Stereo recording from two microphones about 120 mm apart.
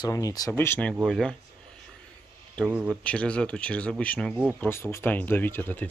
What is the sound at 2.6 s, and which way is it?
Speech, 10° right (ahead or behind).